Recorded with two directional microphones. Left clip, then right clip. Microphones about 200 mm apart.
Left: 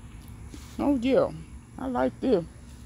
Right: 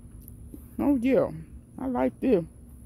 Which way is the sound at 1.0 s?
25° right (ahead or behind).